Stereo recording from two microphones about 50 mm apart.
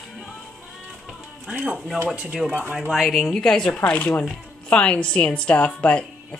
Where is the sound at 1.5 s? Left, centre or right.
Right.